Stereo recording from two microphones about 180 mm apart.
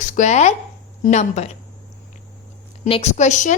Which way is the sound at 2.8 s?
35° left (ahead or behind).